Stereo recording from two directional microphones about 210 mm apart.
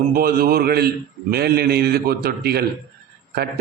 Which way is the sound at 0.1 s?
45° right (ahead or behind).